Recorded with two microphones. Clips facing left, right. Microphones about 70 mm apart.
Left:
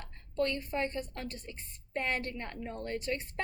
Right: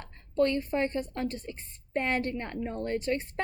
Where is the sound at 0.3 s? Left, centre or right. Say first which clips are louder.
Right 6 dB; right.